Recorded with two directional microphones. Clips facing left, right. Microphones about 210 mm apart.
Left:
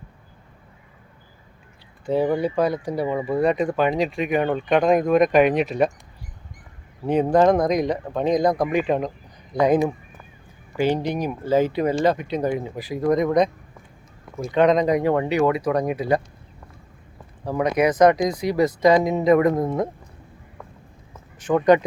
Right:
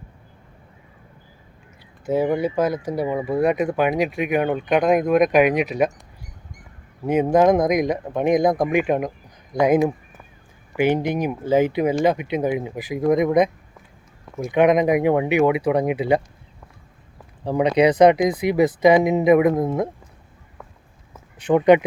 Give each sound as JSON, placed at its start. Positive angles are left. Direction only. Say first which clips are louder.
{"t": 2.0, "sound": "speech", "louder": "right 1 dB", "side_deg": -15}
{"t": 7.0, "sound": "speech", "louder": "right 1 dB", "side_deg": -10}
{"t": 10.8, "sound": "speech", "louder": "right 2 dB", "side_deg": -20}
{"t": 16.0, "sound": "speech", "louder": "right 2 dB", "side_deg": -25}
{"t": 17.4, "sound": "speech", "louder": "right 3 dB", "side_deg": -15}
{"t": 21.5, "sound": "speech", "louder": "right 2 dB", "side_deg": -15}